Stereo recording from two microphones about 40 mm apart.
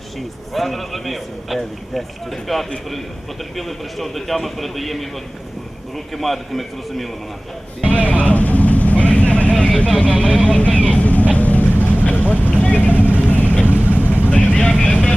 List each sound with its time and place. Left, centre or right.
0.5 s a man's voice: centre
6.1 s a man's voice: centre
8.0 s vehicle: left
10.0 s speech: left
10.4 s vehicle: left
14.3 s vehicle: left